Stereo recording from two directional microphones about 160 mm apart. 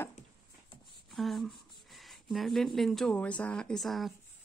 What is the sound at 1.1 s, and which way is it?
Speech, centre (ahead or behind).